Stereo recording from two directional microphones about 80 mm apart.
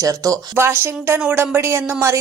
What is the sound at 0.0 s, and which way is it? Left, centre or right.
Speech, right.